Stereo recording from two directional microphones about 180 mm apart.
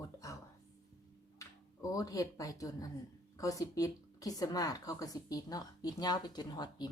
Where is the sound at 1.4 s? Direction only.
20° left (ahead or behind).